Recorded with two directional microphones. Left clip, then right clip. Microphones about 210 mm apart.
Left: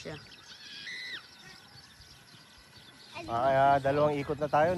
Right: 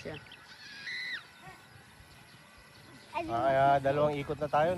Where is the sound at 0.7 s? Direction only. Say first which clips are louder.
Right 2 dB; 5° left (ahead or behind).